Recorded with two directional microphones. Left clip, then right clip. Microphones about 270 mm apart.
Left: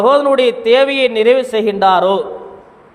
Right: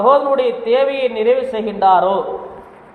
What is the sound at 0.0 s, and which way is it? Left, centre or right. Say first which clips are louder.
A man's voice: left 2 dB; left.